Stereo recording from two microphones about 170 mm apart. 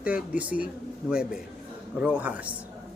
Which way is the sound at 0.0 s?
10° right (ahead or behind).